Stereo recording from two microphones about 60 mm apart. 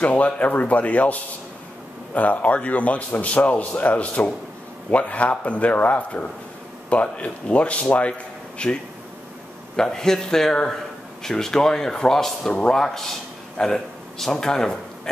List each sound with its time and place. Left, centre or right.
0.0 s a man's voice: left